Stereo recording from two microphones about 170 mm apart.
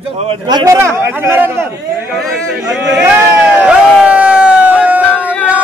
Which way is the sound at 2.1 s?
Centre (ahead or behind).